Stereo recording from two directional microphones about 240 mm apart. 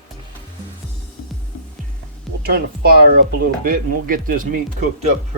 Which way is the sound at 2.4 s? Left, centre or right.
Right.